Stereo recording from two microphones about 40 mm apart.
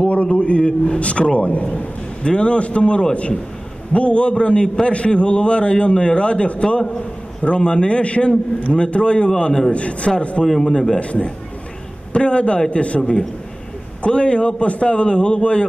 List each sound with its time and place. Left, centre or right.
0.0 s a man's voice: left; by 9.6 s centre
9.7 s a man's voice: left
10.4 s a man's voice: centre
11.0 s a man's voice: left
14.0 s a man's voice: left